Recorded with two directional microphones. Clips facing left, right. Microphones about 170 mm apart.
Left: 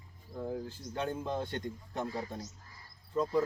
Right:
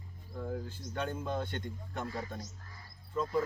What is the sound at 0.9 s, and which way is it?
A man's voice, 25° left (ahead or behind).